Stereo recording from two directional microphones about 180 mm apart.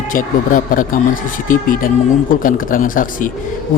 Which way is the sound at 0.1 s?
50° left (ahead or behind).